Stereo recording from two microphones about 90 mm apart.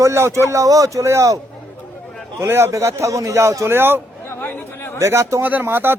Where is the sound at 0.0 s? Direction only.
30° right (ahead or behind).